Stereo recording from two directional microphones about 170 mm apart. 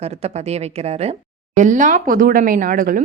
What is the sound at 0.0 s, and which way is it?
A woman's voice, 40° right (ahead or behind).